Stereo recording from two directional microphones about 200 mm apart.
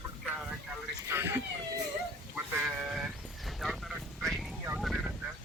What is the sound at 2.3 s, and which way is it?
Sheep, 10° right (ahead or behind).